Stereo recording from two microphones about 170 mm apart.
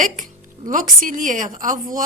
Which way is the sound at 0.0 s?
50° right (ahead or behind).